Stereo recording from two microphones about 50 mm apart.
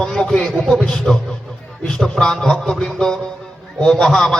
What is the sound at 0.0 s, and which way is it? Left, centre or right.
A man's voice, centre.